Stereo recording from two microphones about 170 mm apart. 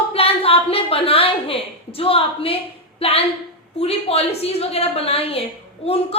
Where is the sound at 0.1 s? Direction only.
35° left (ahead or behind).